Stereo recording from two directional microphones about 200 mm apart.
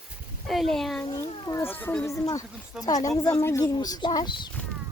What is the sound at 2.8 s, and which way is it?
Speech, 20° left (ahead or behind).